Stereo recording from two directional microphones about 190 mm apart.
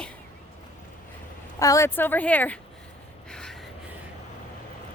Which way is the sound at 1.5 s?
15° left (ahead or behind).